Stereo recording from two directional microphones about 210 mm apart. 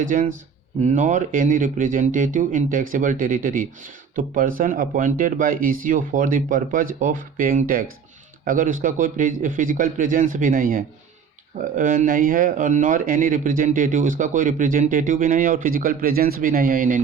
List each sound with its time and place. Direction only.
0.0 s speech: 40° right (ahead or behind)